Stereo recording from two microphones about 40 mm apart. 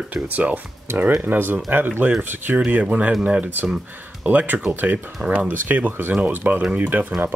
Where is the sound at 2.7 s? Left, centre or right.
Right.